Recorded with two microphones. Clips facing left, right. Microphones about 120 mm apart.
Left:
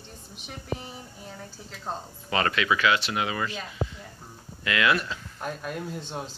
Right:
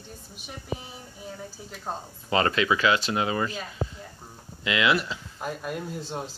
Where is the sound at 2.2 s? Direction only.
25° right (ahead or behind).